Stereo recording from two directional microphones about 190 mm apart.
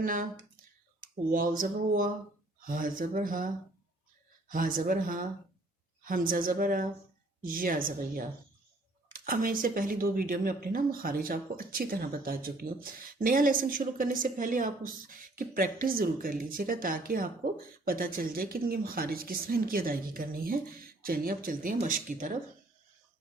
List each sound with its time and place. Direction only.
0.0 s speech: 45° right (ahead or behind)
1.3 s speech: 45° right (ahead or behind)